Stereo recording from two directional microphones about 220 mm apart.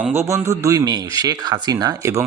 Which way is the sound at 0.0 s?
10° right (ahead or behind).